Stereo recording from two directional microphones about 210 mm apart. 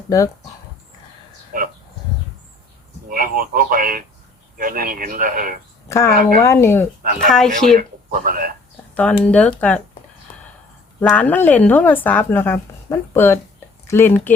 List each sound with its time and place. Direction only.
1.5 s a sound: 45° right (ahead or behind)
3.1 s speech: 45° right (ahead or behind)
5.9 s a woman's voice: 15° left (ahead or behind)
7.3 s speech: centre (ahead or behind)
7.8 s speech: 40° right (ahead or behind)
9.0 s a woman's voice: 5° left (ahead or behind)
11.1 s a woman's voice: 5° left (ahead or behind)